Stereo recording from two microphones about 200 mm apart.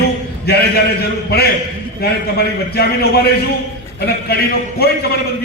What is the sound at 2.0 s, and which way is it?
A man's voice, 50° left (ahead or behind).